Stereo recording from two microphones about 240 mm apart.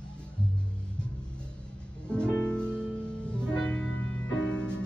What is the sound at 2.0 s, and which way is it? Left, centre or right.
Music, centre.